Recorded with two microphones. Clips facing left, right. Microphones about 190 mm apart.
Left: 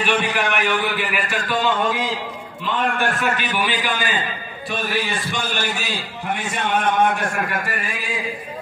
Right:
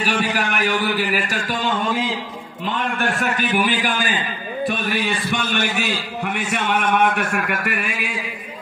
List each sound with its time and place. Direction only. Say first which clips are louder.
0.0 s a man's voice: left 1 dB; 35° right (ahead or behind)
3.2 s a man's voice: right 2 dB; 45° right (ahead or behind); by 8.1 s 65° right (ahead or behind)